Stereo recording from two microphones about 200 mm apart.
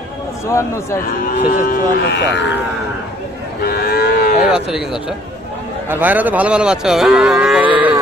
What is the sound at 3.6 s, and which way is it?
Cattle, 50° left (ahead or behind).